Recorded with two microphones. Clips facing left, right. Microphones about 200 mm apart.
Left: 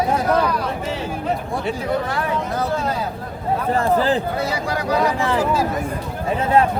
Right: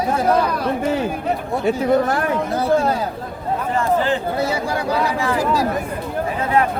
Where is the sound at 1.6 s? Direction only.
45° right (ahead or behind).